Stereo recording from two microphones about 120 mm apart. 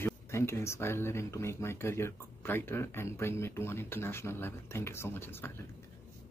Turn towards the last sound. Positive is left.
turn(degrees=20)  # may be behind; listen again after turning